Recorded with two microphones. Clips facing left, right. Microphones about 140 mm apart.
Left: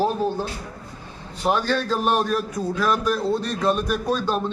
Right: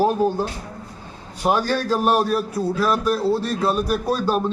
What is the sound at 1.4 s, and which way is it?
A man's voice, 10° right (ahead or behind).